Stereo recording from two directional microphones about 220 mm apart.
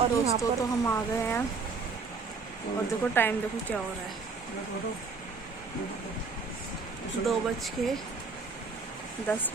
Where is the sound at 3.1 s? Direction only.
10° left (ahead or behind).